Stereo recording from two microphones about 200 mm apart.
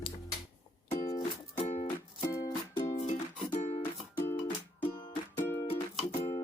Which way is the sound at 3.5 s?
35° left (ahead or behind).